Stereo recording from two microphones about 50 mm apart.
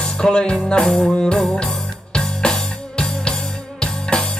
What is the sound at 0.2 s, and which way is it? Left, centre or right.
Music, centre.